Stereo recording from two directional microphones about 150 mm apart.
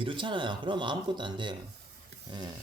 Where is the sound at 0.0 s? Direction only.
35° right (ahead or behind).